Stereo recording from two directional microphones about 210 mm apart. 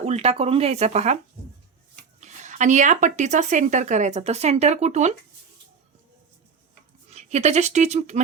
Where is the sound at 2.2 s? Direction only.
35° right (ahead or behind).